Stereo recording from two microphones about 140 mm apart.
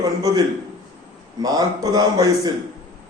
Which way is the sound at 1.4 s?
25° right (ahead or behind).